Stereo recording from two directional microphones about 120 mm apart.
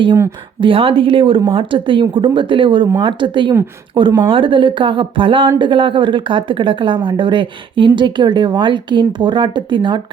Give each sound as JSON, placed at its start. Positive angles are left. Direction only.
{"t": 0.6, "sound": "speech", "side_deg": -50}